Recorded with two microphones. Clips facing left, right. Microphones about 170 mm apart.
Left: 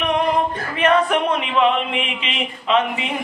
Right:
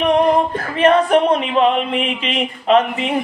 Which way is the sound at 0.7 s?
35° right (ahead or behind).